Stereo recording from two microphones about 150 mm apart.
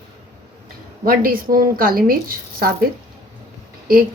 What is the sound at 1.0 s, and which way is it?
A woman's voice, 70° right (ahead or behind).